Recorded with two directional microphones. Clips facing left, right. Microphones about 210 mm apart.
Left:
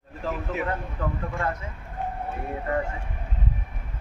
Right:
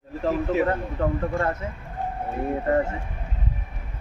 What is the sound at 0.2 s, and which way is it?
A man's voice, 40° right (ahead or behind).